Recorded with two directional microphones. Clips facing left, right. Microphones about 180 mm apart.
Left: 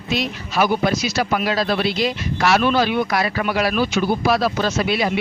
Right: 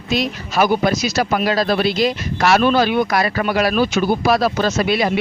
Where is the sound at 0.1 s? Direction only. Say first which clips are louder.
Right 3 dB; 40° right (ahead or behind).